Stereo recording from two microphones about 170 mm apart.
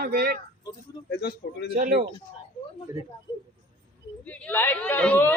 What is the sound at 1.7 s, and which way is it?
Speech, 55° right (ahead or behind).